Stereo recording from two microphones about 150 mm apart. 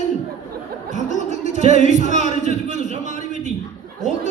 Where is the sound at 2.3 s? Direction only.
50° right (ahead or behind).